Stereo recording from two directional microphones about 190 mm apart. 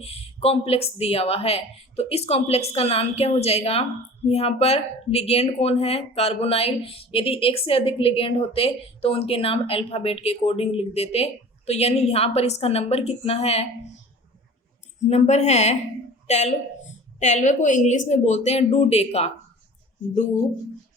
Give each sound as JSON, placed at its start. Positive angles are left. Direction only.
{"t": 0.0, "sound": "speech", "side_deg": 30}
{"t": 15.0, "sound": "a woman's voice", "side_deg": 35}